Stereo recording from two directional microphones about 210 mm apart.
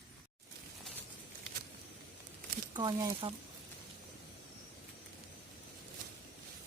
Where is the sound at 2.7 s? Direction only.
20° right (ahead or behind).